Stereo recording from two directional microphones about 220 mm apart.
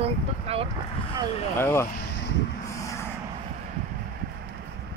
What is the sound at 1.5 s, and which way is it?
Speech, 10° left (ahead or behind).